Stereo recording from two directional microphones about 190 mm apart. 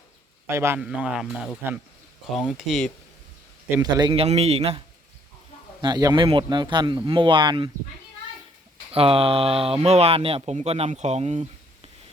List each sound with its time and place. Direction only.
0.4 s a man's voice: 15° right (ahead or behind)
3.8 s speech: 20° right (ahead or behind)
5.8 s speech: 20° right (ahead or behind)
8.9 s speech: 30° right (ahead or behind)